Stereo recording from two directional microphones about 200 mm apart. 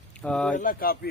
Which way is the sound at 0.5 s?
45° left (ahead or behind).